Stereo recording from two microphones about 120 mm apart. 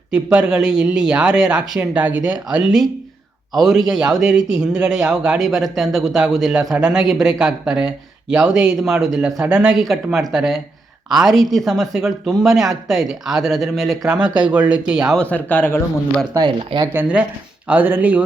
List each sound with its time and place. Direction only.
0.1 s a man's voice: 10° right (ahead or behind)
15.2 s a man's voice: 10° left (ahead or behind)
16.6 s speech: 50° right (ahead or behind)
16.9 s speech: 15° right (ahead or behind)